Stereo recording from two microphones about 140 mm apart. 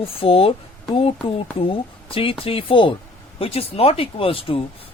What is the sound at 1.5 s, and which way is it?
Speech, 40° left (ahead or behind).